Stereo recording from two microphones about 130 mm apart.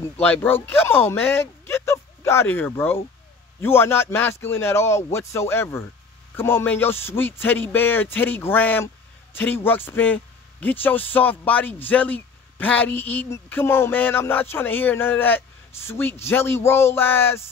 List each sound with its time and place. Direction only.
0.2 s a man's voice: 15° left (ahead or behind)